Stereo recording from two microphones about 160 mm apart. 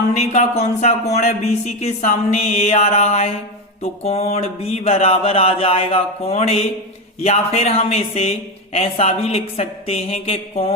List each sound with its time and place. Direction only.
0.2 s speech: 40° left (ahead or behind)